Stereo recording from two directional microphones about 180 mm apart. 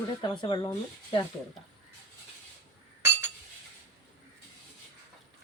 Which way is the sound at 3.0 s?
15° right (ahead or behind).